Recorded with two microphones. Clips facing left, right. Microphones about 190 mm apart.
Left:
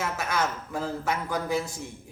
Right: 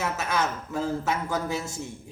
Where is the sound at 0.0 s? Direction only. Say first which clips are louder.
Right 1 dB; 20° right (ahead or behind).